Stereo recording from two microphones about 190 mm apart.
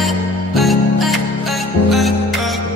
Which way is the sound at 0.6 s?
Centre (ahead or behind).